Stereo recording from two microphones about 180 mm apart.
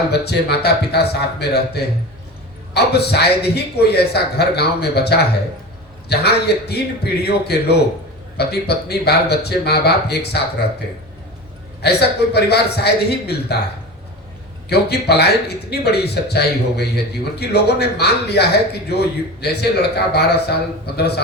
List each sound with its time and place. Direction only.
0.1 s a man's voice: 65° left (ahead or behind)
11.8 s a man's voice: 65° left (ahead or behind)
14.7 s a man's voice: 65° left (ahead or behind)